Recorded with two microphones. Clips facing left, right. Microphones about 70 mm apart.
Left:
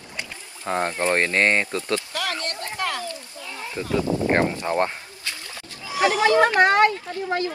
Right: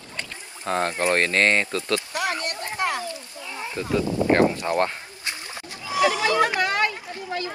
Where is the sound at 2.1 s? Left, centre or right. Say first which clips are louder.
Right 1 dB; right.